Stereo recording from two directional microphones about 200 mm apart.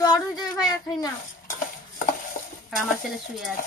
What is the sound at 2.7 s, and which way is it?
Speech, centre (ahead or behind).